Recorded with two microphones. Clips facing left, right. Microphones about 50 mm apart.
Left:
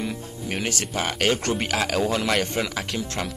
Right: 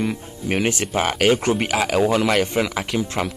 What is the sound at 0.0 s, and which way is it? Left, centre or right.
Speech, centre.